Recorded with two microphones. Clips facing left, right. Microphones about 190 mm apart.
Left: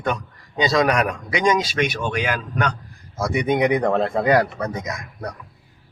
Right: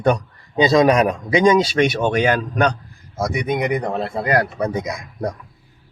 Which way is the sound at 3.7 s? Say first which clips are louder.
Left 3 dB; 5° right (ahead or behind).